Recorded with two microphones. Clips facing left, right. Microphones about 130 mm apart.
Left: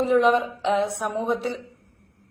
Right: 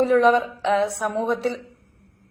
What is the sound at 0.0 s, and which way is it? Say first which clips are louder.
A woman's voice: right 2 dB; 20° left (ahead or behind).